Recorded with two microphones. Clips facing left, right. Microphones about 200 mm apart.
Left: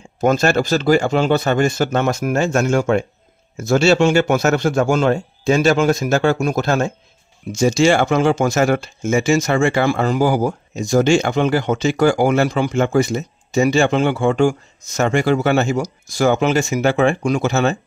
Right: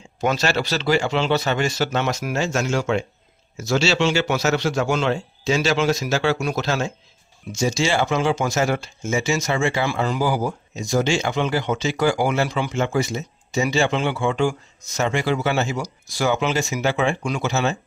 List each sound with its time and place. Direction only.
0.2 s speech: 50° left (ahead or behind)